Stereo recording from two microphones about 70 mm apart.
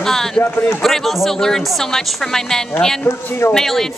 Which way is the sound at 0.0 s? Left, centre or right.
Centre.